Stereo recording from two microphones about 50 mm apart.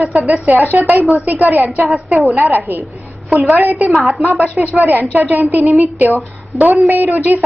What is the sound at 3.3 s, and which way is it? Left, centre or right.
Speech, right.